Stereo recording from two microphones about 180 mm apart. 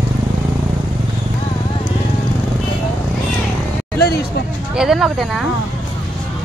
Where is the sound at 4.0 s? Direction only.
60° left (ahead or behind).